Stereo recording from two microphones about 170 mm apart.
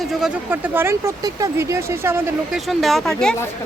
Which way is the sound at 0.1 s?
5° right (ahead or behind).